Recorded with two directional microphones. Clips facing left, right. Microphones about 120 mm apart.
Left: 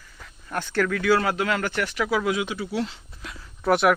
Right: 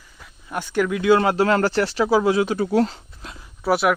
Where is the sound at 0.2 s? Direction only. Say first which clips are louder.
Right 1 dB; 10° right (ahead or behind); by 3.0 s 45° right (ahead or behind).